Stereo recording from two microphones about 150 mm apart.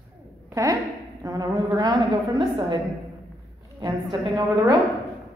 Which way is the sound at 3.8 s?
30° right (ahead or behind).